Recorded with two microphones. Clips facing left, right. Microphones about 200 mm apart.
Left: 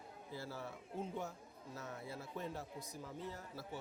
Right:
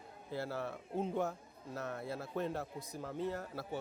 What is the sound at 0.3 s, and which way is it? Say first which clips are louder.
A man's voice: right 8 dB; 65° right (ahead or behind).